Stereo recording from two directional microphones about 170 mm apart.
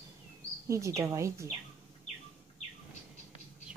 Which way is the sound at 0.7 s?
20° right (ahead or behind).